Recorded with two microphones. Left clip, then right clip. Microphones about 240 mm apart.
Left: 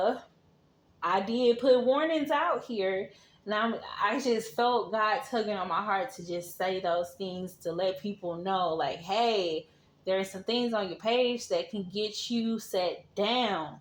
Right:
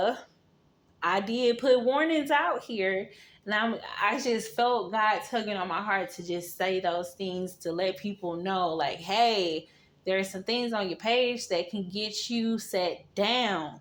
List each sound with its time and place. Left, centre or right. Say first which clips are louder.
0.9 s speech: right 1 dB; right